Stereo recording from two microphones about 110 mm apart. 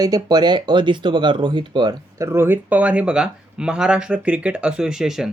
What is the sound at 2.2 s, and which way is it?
Speech, 25° right (ahead or behind).